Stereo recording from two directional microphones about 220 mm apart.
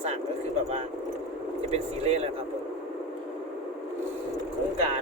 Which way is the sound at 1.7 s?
30° right (ahead or behind).